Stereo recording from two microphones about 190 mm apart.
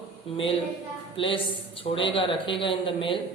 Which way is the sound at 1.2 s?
30° left (ahead or behind).